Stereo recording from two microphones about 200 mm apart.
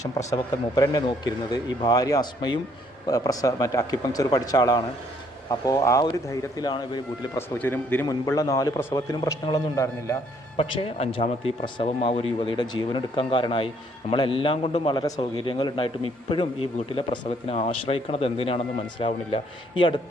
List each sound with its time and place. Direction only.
0.3 s a man's voice: 15° left (ahead or behind)
7.6 s a man's voice: 10° left (ahead or behind)
8.0 s a man's voice: 20° left (ahead or behind)
10.6 s a man's voice: 30° left (ahead or behind)